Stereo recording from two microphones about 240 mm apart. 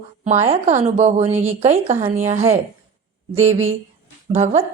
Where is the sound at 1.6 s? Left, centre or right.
Right.